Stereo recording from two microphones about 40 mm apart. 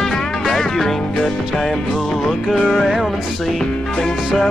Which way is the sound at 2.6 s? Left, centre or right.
Centre.